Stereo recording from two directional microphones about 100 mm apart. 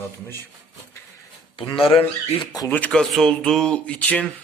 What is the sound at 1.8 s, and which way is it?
Speech, 70° left (ahead or behind).